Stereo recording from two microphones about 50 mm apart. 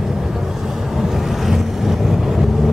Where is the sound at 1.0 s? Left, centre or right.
Centre.